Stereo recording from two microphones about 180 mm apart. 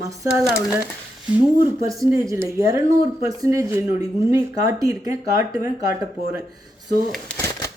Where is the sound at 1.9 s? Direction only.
15° right (ahead or behind).